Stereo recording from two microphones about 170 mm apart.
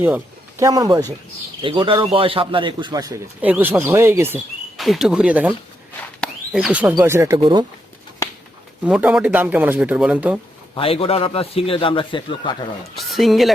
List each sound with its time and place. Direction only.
0.0 s a man's voice: 15° right (ahead or behind)
3.4 s speech: 10° right (ahead or behind)
4.8 s speech: centre (ahead or behind)
6.1 s a sound: centre (ahead or behind)
7.0 s speech: 15° right (ahead or behind)
8.8 s speech: 5° right (ahead or behind)
10.8 s a man's voice: 35° left (ahead or behind)
13.0 s a woman's voice: centre (ahead or behind)